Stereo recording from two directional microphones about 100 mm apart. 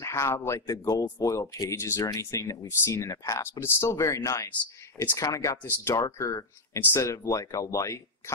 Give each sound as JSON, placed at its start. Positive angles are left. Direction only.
{"t": 0.0, "sound": "speech", "side_deg": 30}
{"t": 0.6, "sound": "speech", "side_deg": 35}
{"t": 4.9, "sound": "speech", "side_deg": 25}